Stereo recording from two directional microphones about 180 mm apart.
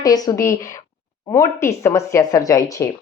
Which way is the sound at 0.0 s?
20° left (ahead or behind).